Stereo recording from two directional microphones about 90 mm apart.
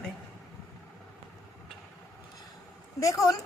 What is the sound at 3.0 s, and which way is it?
Speech, 40° left (ahead or behind).